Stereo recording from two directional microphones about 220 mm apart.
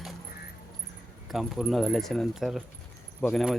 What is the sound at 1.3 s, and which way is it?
Speech, centre (ahead or behind).